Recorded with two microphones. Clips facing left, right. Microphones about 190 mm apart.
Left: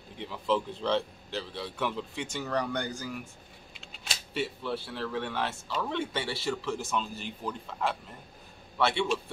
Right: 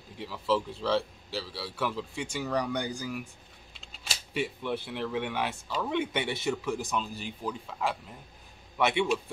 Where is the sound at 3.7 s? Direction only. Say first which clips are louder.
Even; centre (ahead or behind).